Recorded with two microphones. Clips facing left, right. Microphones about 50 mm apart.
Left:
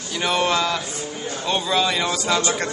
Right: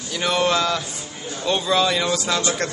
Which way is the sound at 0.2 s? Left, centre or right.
Centre.